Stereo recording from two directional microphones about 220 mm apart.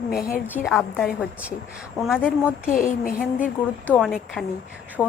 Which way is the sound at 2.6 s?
35° left (ahead or behind).